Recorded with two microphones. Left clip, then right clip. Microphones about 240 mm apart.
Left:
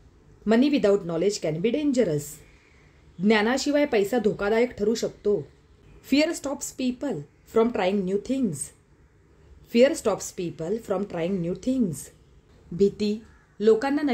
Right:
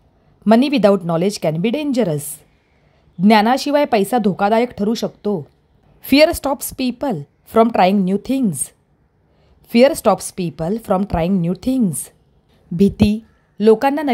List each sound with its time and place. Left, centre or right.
0.5 s a woman's voice: right